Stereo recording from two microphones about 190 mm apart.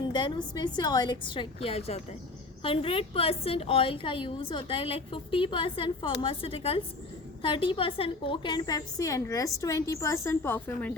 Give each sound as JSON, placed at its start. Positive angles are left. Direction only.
{"t": 0.1, "sound": "a woman's voice", "side_deg": 25}